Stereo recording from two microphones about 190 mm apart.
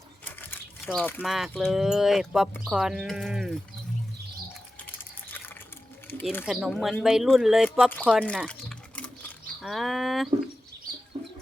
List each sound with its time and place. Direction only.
0.3 s speech: 10° left (ahead or behind)
6.4 s speech: 5° right (ahead or behind)
9.0 s a sound: 5° left (ahead or behind)
11.1 s bird: 30° right (ahead or behind)